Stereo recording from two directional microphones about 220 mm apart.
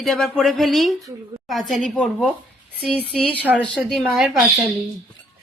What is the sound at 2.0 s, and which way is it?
Speech, centre (ahead or behind).